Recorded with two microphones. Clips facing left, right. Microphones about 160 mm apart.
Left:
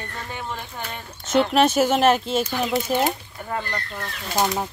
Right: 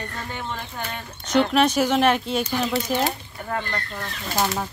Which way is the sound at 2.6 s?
15° left (ahead or behind).